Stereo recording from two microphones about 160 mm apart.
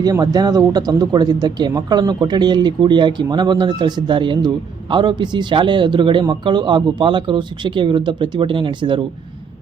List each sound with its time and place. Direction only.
0.0 s speech: 25° right (ahead or behind)